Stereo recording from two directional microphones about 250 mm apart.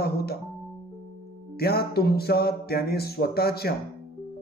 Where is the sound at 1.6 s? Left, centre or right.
Left.